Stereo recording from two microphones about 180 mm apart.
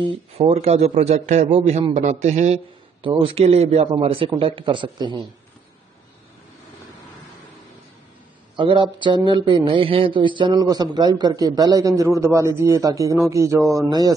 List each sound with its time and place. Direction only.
0.1 s a man's voice: 35° right (ahead or behind)
8.5 s speech: 25° right (ahead or behind)